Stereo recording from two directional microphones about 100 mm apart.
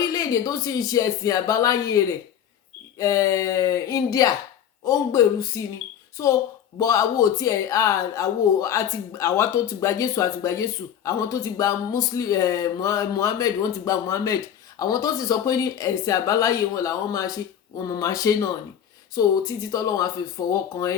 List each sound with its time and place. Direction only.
0.0 s speech: 35° left (ahead or behind)
6.7 s speech: 35° left (ahead or behind)